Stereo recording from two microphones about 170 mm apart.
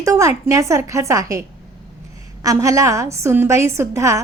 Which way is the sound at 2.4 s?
20° right (ahead or behind).